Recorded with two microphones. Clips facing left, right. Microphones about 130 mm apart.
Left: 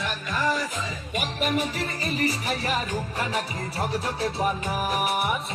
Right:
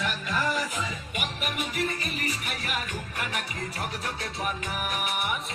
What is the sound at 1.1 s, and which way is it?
Music, 35° left (ahead or behind).